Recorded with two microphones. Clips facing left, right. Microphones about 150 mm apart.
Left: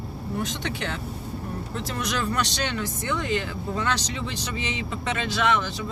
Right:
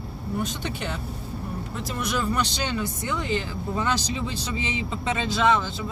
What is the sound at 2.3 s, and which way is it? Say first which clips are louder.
Speech: right 1 dB; 15° right (ahead or behind).